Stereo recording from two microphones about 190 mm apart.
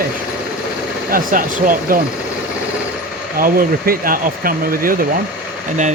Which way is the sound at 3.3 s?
50° right (ahead or behind).